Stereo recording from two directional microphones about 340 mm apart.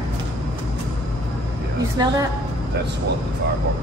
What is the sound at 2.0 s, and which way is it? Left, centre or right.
Speech, centre.